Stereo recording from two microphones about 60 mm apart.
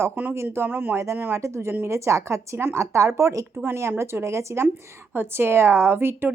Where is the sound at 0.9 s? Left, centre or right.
Right.